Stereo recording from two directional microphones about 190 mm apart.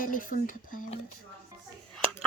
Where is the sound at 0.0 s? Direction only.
45° left (ahead or behind).